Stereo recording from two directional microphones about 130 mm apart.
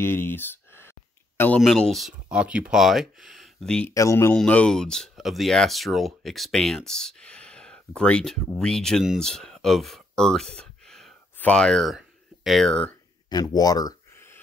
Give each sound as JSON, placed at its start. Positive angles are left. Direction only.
{"t": 0.0, "sound": "a sound", "side_deg": 15}
{"t": 1.6, "sound": "speech", "side_deg": 5}
{"t": 3.9, "sound": "speech", "side_deg": 25}
{"t": 4.4, "sound": "speech", "side_deg": 10}
{"t": 10.6, "sound": "a sound", "side_deg": 0}
{"t": 11.3, "sound": "speech", "side_deg": 10}
{"t": 13.3, "sound": "speech", "side_deg": 30}